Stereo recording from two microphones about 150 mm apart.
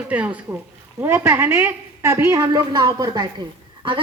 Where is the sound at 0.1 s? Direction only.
10° right (ahead or behind).